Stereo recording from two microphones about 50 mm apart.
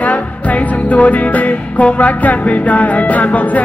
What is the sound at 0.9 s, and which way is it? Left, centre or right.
Music, left.